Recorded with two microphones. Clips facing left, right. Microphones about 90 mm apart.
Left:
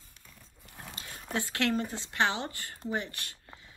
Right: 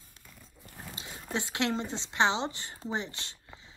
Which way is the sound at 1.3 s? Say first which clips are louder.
Left 1 dB; 20° right (ahead or behind).